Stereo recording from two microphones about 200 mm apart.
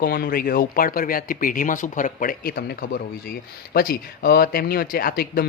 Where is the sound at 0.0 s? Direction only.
50° left (ahead or behind).